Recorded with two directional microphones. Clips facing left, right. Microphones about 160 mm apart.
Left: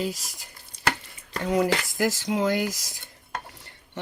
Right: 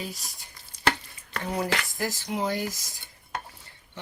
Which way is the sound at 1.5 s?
90° left.